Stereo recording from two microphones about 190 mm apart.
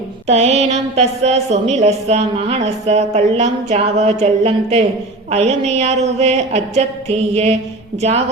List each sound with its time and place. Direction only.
0.3 s a woman's voice: 35° right (ahead or behind)